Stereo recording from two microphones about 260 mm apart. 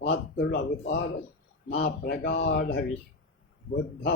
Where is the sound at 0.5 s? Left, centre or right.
Left.